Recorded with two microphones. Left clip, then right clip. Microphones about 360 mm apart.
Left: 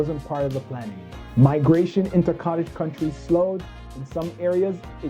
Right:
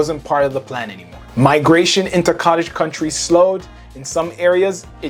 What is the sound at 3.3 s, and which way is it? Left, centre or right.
Speech, centre.